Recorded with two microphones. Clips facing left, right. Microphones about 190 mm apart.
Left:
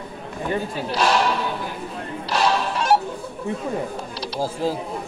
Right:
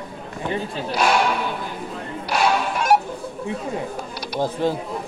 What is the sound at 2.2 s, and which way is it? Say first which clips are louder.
Music: right 1 dB; 15° right (ahead or behind).